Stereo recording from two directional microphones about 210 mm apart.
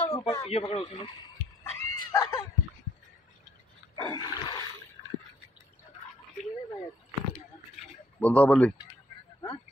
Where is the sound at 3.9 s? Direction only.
20° left (ahead or behind).